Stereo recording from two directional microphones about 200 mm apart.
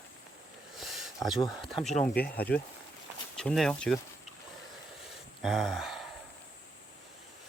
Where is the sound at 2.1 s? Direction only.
50° left (ahead or behind).